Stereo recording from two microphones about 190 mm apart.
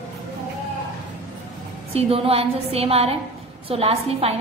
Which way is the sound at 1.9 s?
30° right (ahead or behind).